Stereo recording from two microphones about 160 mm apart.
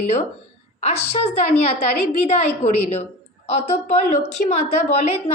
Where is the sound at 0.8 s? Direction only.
40° left (ahead or behind).